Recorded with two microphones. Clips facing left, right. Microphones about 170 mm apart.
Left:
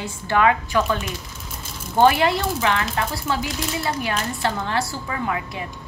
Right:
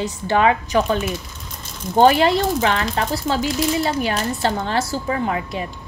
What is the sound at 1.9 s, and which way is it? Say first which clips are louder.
A woman's voice: right 3 dB; 30° right (ahead or behind).